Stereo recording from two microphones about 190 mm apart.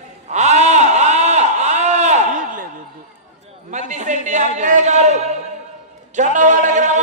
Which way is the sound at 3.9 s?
40° right (ahead or behind).